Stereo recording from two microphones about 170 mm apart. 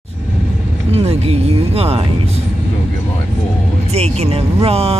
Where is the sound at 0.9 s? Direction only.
35° right (ahead or behind).